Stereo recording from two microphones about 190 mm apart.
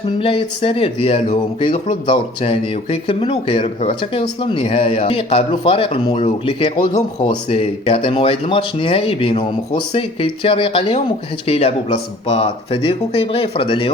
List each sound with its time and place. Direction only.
0.2 s speech: 30° left (ahead or behind)